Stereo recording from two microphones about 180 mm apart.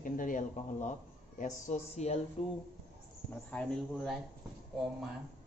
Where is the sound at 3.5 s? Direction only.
5° left (ahead or behind).